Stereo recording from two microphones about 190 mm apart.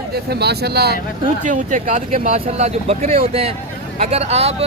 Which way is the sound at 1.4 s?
40° right (ahead or behind).